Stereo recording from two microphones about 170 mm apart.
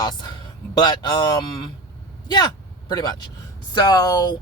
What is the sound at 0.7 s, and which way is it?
Speech, 20° left (ahead or behind).